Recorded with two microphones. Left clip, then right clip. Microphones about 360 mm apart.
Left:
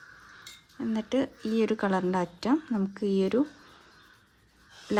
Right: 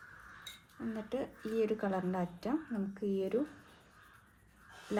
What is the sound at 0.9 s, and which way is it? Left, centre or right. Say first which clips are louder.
Speech: left 10 dB; centre.